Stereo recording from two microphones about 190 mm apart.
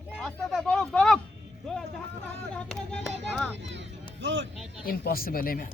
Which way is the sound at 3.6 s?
75° right (ahead or behind).